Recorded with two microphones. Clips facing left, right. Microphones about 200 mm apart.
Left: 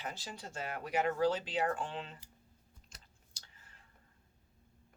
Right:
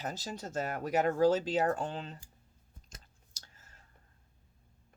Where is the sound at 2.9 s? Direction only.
45° right (ahead or behind).